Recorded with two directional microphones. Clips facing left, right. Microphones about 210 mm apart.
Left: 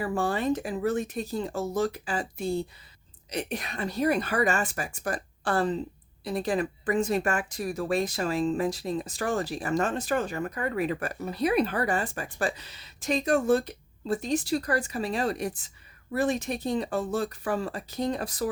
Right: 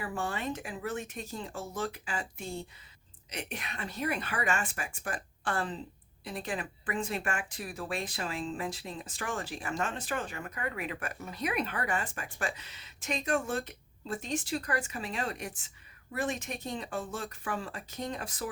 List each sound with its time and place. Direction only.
0.0 s speech: 40° left (ahead or behind)